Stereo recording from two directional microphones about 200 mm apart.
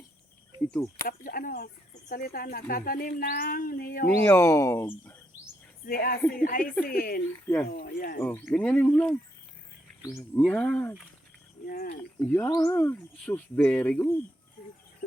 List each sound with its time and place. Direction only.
0.7 s speech: 15° left (ahead or behind)
1.0 s speech: 45° left (ahead or behind)
4.2 s speech: 10° left (ahead or behind)
5.8 s speech: 50° left (ahead or behind)
8.2 s speech: 10° left (ahead or behind)
11.6 s speech: 50° left (ahead or behind)
12.2 s speech: 10° left (ahead or behind)